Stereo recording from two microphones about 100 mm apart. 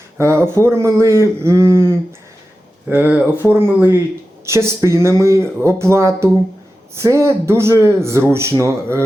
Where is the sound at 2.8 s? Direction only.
15° right (ahead or behind).